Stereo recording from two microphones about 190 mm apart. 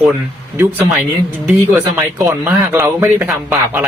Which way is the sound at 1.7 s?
15° right (ahead or behind).